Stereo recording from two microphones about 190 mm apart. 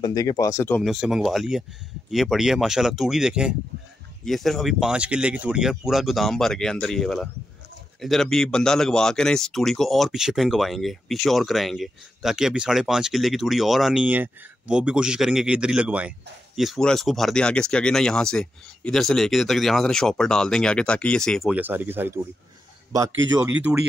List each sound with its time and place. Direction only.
0.0 s speech: 20° left (ahead or behind)
0.8 s speech: centre (ahead or behind)
23.3 s speech: 10° right (ahead or behind)